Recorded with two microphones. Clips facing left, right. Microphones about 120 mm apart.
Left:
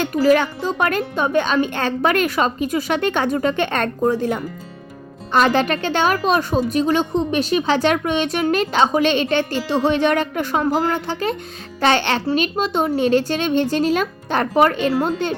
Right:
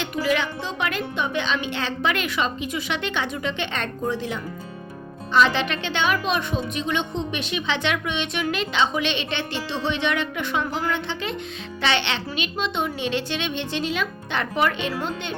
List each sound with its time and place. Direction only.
0.0 s a woman's voice: 40° left (ahead or behind)